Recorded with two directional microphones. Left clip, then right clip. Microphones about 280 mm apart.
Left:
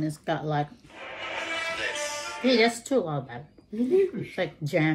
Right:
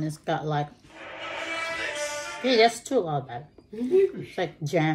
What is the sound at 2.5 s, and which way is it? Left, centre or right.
A woman's voice, centre.